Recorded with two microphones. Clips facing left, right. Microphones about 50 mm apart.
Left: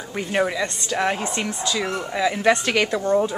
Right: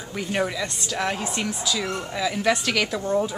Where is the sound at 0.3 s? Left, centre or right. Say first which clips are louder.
Left 4 dB; centre.